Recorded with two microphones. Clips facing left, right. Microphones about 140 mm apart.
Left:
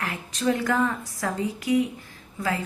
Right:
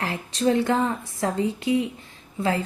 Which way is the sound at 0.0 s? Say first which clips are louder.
Right 3 dB; 30° right (ahead or behind).